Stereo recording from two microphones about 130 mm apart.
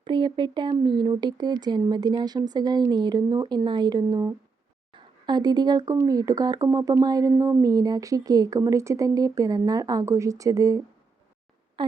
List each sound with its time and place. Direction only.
0.0 s speech: 40° right (ahead or behind)
4.9 s speech: 35° right (ahead or behind)
11.8 s a sound: 40° right (ahead or behind)